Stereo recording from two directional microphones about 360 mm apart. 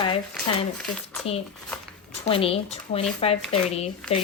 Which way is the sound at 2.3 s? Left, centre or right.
Centre.